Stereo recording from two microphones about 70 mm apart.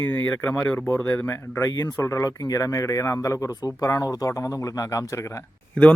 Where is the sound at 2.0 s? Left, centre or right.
Left.